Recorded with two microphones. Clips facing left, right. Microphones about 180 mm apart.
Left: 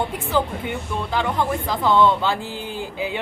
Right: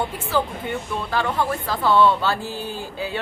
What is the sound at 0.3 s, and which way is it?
Speech, 15° left (ahead or behind).